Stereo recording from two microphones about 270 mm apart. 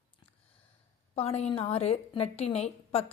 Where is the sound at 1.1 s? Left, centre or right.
Left.